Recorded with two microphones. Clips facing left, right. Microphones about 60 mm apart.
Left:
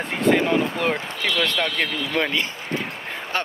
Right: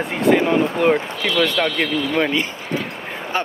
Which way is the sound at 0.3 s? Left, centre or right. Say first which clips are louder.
Right 3 dB; centre.